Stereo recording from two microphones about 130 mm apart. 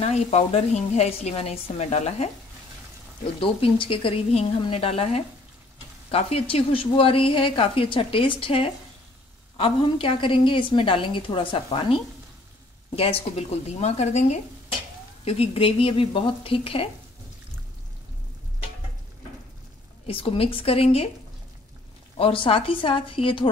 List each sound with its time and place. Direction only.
0.0 s speech: 55° left (ahead or behind)
3.3 s a woman's voice: 40° left (ahead or behind)
20.1 s a woman's voice: 45° left (ahead or behind)
22.1 s a woman's voice: 45° left (ahead or behind)